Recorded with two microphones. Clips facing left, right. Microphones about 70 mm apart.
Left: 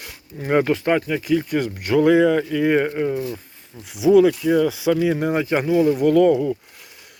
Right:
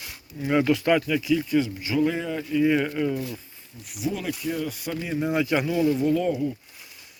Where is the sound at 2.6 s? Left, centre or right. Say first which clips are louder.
Left 5 dB; left.